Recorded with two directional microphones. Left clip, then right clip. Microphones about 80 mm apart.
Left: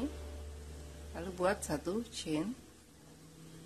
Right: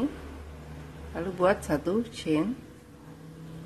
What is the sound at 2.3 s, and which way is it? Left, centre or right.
Speech, left.